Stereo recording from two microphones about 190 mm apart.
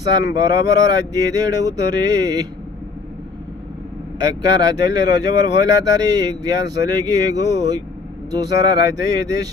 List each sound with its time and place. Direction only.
0.2 s speech: 20° right (ahead or behind)
4.2 s speech: 20° right (ahead or behind)